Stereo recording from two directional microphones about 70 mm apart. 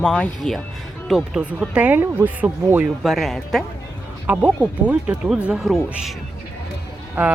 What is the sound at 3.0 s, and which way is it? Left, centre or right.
Speech, centre.